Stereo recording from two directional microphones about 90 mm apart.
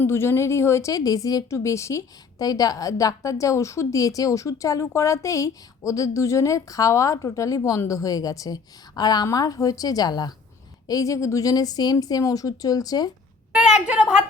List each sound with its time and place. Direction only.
0.0 s a woman's voice: 25° left (ahead or behind); by 13.1 s 45° left (ahead or behind)
13.5 s a woman's voice: 10° right (ahead or behind)